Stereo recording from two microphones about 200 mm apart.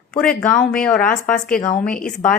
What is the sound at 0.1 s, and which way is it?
A woman's voice, 5° left (ahead or behind).